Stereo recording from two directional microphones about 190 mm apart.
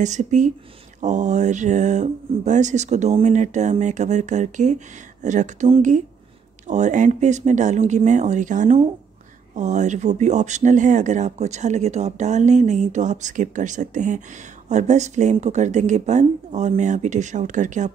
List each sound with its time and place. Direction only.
0.0 s speech: 40° right (ahead or behind)